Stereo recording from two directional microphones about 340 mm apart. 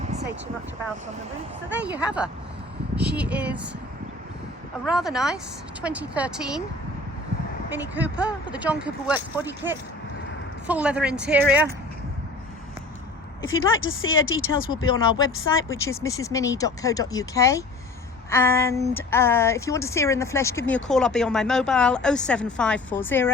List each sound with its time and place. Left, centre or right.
0.0 s vehicle: centre
1.9 s speech: centre
4.9 s speech: centre
7.9 s speech: centre
13.5 s speech: left
15.7 s speech: centre